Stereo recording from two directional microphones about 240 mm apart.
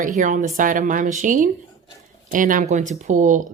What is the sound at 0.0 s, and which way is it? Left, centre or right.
Speech, right.